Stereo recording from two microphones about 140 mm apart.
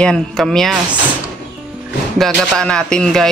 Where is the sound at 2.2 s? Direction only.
5° left (ahead or behind).